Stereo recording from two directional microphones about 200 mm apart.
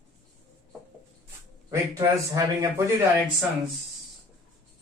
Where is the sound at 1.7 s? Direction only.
15° right (ahead or behind).